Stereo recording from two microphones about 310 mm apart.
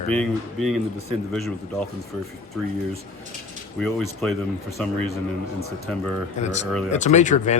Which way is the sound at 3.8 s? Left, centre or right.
Centre.